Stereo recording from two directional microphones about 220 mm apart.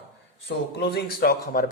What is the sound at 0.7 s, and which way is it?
Speech, 45° left (ahead or behind).